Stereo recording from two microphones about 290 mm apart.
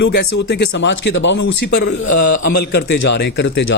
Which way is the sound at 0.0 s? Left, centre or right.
Left.